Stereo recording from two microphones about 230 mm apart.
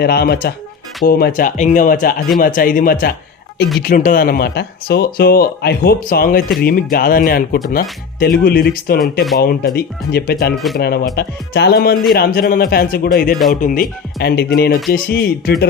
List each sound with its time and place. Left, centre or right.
0.0 s speech: left
10.5 s speech: centre
10.8 s speech: left